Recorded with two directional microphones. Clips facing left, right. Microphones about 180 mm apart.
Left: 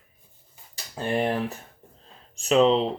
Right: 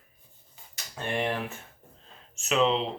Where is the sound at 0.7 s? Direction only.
35° left (ahead or behind).